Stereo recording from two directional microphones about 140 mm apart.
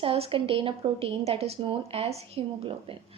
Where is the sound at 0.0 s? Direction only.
40° right (ahead or behind).